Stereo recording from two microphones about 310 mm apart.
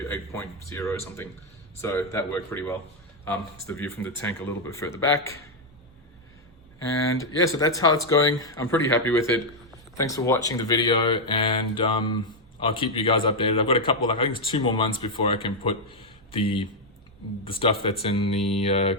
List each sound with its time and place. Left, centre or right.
0.1 s speech: centre
6.8 s speech: centre